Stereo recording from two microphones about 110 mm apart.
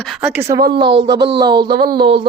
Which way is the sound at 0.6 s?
45° right (ahead or behind).